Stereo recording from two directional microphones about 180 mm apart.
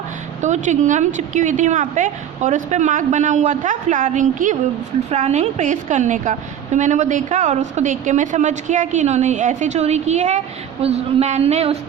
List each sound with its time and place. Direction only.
0.4 s a woman's voice: 40° right (ahead or behind)